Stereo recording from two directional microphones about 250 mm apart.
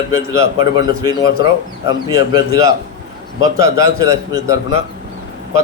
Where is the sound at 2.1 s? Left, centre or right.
Centre.